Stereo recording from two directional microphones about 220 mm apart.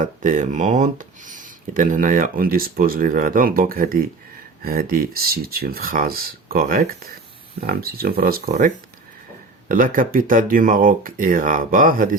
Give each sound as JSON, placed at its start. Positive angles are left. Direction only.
{"t": 0.0, "sound": "speech", "side_deg": -35}